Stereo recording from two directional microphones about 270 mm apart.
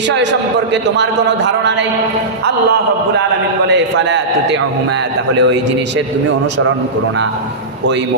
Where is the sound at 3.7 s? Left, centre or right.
Right.